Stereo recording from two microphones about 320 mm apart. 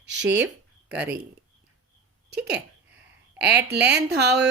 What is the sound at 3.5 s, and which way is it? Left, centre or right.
Speech, right.